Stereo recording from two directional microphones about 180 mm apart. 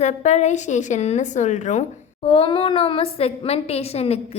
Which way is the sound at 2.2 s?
30° left (ahead or behind).